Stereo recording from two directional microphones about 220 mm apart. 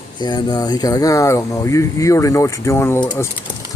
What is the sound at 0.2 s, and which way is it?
Speech, 20° left (ahead or behind).